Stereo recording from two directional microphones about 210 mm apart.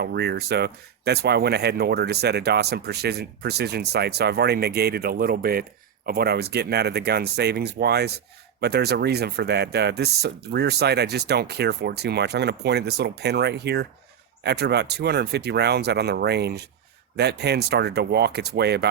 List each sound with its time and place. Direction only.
0.0 s speech: 50° right (ahead or behind)